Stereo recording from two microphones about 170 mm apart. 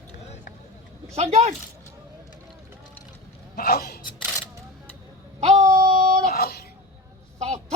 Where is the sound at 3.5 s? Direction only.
65° left (ahead or behind).